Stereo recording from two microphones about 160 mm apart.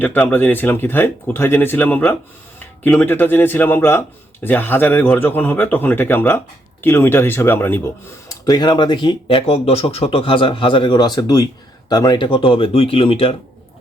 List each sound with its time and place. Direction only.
0.0 s speech: 10° left (ahead or behind)
8.3 s speech: 25° left (ahead or behind)